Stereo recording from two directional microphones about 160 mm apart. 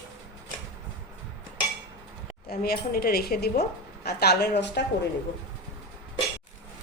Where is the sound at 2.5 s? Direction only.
70° left (ahead or behind); by 4.8 s 90° left.